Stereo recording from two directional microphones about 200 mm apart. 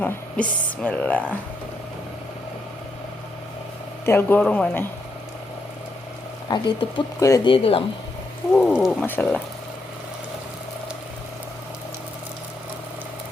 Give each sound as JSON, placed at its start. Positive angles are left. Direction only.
{"t": 0.4, "sound": "speech", "side_deg": 5}
{"t": 4.0, "sound": "speech", "side_deg": 10}
{"t": 6.5, "sound": "speech", "side_deg": 20}
{"t": 8.5, "sound": "speech", "side_deg": 0}